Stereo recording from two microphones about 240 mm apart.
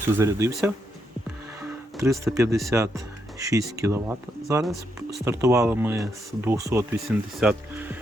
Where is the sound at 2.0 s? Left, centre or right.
Centre.